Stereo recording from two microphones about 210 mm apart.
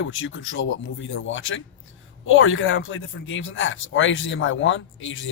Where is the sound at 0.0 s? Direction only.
65° left (ahead or behind).